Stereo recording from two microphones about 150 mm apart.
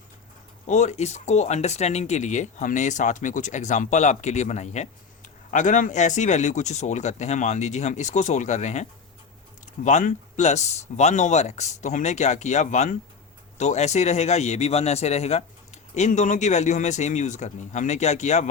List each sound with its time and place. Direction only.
0.7 s speech: 50° left (ahead or behind)